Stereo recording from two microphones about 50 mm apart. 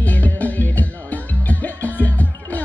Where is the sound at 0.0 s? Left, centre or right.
Left.